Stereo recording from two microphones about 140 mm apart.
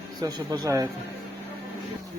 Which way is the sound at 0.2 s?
30° right (ahead or behind).